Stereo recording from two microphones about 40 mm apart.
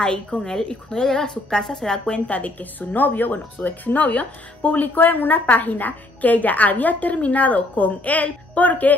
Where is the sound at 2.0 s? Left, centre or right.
Left.